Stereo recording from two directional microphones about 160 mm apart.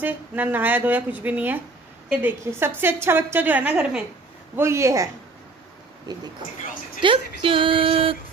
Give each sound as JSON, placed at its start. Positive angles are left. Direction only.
{"t": 0.0, "sound": "a woman's voice", "side_deg": -10}
{"t": 7.0, "sound": "speech", "side_deg": -30}